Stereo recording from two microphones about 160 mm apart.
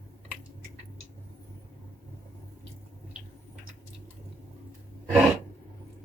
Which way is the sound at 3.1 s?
5° right (ahead or behind).